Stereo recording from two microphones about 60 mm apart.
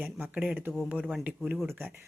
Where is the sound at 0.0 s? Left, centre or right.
Right.